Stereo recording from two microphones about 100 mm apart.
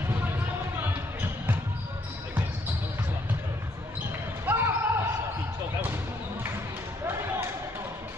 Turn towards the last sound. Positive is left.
turn(degrees=-20)  # may be behind; listen again after turning